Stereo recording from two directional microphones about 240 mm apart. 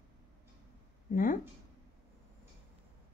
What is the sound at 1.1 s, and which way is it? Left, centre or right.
Speech, left.